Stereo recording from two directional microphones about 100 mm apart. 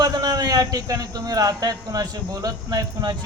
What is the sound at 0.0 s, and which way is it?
A man's voice, 45° right (ahead or behind).